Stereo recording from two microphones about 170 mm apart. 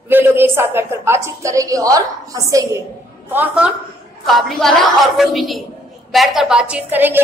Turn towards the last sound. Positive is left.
turn(degrees=-10)  # may be behind; listen again after turning